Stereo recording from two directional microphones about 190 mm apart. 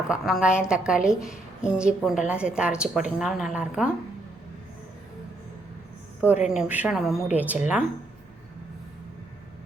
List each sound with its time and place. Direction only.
0.1 s a woman's voice: centre (ahead or behind)
6.2 s a woman's voice: 5° right (ahead or behind)